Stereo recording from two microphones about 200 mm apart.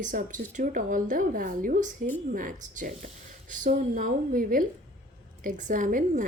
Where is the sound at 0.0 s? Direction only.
40° right (ahead or behind).